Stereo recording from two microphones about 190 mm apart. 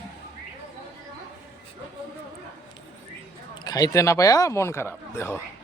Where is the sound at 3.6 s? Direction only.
20° left (ahead or behind).